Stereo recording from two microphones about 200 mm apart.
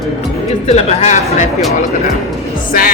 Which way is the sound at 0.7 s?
30° left (ahead or behind).